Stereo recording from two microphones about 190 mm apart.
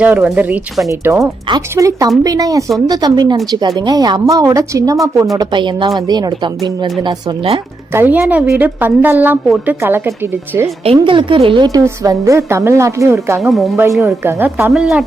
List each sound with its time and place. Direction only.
0.0 s a woman's voice: 10° right (ahead or behind); by 7.6 s 25° right (ahead or behind)
7.9 s a woman's voice: 10° right (ahead or behind)
10.8 s a woman's voice: 25° right (ahead or behind)
13.4 s speech: centre (ahead or behind)
14.0 s a woman's voice: 15° right (ahead or behind)
14.7 s speech: centre (ahead or behind)